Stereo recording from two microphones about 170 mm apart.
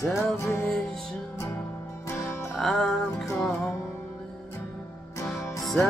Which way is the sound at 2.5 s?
Centre (ahead or behind).